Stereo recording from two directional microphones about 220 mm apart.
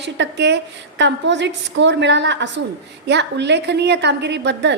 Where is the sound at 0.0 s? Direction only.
50° right (ahead or behind).